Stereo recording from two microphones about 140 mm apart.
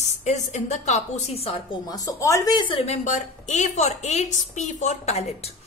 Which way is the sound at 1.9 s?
25° left (ahead or behind).